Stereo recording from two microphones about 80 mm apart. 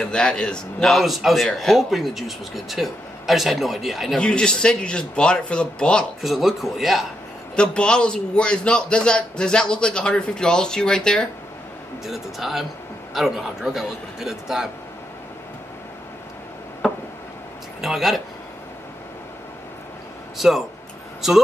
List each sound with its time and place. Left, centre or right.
0.0 s a man's voice: centre
0.9 s speech: centre
4.2 s a man's voice: centre
6.2 s speech: centre
7.5 s a man's voice: centre
12.0 s speech: centre
16.8 s a sound: centre
17.8 s speech: centre
20.3 s speech: centre